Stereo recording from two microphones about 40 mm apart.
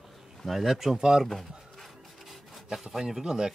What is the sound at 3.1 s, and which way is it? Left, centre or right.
Speech, centre.